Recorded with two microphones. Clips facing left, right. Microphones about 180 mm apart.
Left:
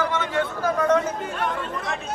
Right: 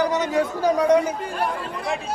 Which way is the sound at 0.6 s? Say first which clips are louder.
Right 3 dB; 15° right (ahead or behind).